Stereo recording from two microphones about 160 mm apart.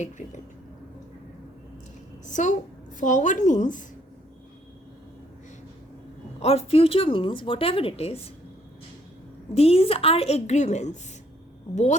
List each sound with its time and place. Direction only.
0.0 s speech: 50° left (ahead or behind)
2.2 s a woman's voice: 50° left (ahead or behind)
6.4 s speech: 40° left (ahead or behind)
9.6 s a woman's voice: 40° left (ahead or behind)